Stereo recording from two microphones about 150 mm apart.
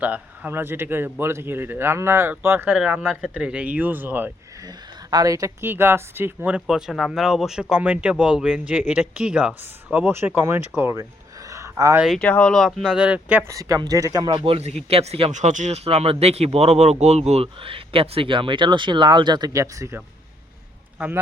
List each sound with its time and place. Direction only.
0.0 s speech: 10° right (ahead or behind)
5.1 s speech: 25° right (ahead or behind)
11.4 s a sound: 20° right (ahead or behind)
11.9 s speech: centre (ahead or behind)
13.5 s speech: 20° right (ahead or behind)